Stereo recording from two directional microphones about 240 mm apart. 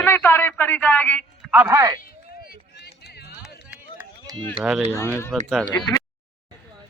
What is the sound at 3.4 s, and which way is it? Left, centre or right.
Music, centre.